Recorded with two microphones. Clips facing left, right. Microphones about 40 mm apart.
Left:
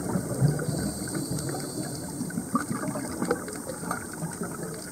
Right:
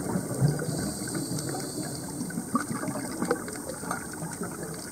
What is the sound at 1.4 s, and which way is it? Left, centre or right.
Water, centre.